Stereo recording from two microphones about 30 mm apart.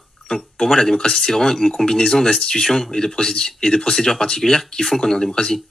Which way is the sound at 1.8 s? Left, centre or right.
Left.